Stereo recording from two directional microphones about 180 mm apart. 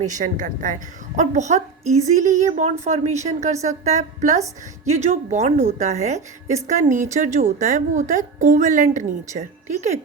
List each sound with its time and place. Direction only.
0.0 s a woman's voice: 45° right (ahead or behind)